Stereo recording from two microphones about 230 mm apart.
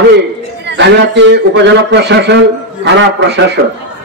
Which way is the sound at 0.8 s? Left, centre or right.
Right.